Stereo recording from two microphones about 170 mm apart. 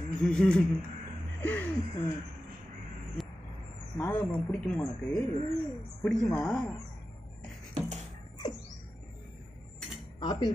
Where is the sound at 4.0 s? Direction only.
10° left (ahead or behind).